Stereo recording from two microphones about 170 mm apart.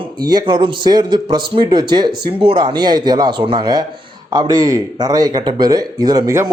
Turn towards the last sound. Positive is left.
turn(degrees=-20)  # may be behind; listen again after turning